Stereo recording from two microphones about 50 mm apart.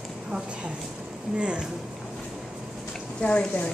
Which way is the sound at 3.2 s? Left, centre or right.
Left.